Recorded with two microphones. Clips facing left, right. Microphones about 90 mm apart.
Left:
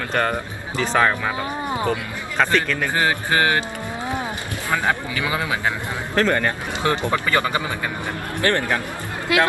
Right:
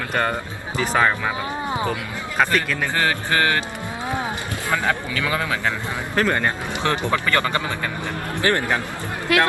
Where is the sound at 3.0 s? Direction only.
20° left (ahead or behind).